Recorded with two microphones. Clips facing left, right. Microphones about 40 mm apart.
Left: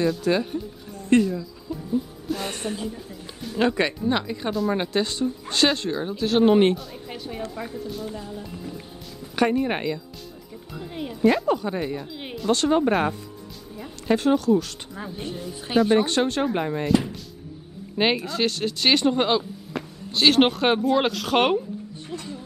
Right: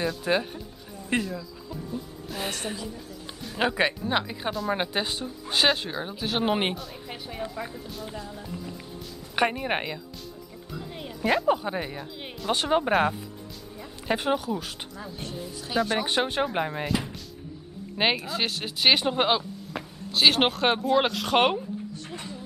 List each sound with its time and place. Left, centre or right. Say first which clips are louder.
0.2 s speech: left 3 dB; centre
1.2 s music: left 7 dB; centre
3.5 s speech: left 3 dB; centre
9.3 s speech: left 3 dB; centre
10.7 s speech: left 5 dB; centre
11.2 s speech: left 3 dB; centre
12.1 s music: left 4 dB; centre
12.4 s speech: left 4 dB; centre
15.7 s speech: left 5 dB; left
16.1 s speech: left 3 dB; centre